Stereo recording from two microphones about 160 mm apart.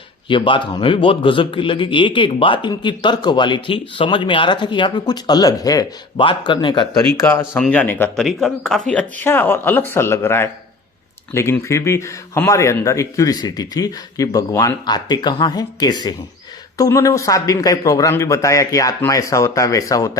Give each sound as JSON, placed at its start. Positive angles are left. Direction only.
{"t": 0.3, "sound": "a man's voice", "side_deg": 30}
{"t": 7.3, "sound": "speech", "side_deg": 15}